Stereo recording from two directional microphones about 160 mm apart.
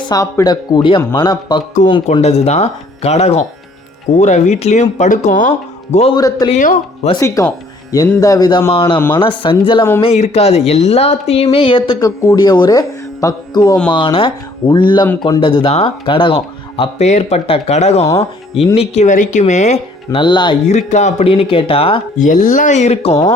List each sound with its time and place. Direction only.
0.0 s speech: 20° left (ahead or behind)
2.2 s speech: 40° left (ahead or behind)
6.1 s speech: 25° left (ahead or behind)
6.5 s speech: 50° left (ahead or behind)
7.2 s speech: 20° left (ahead or behind); by 19.8 s 45° left (ahead or behind)
20.1 s speech: 30° left (ahead or behind)
20.7 s speech: 45° left (ahead or behind)
22.2 s speech: 50° left (ahead or behind)